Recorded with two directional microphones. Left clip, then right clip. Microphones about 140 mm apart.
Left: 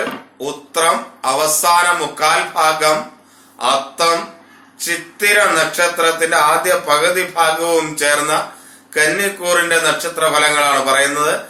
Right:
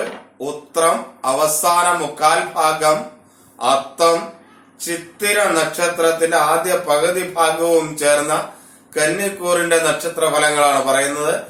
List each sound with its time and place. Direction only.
0.3 s speech: 15° right (ahead or behind)